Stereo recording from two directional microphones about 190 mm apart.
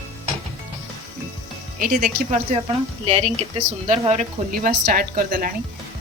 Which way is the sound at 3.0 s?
30° right (ahead or behind).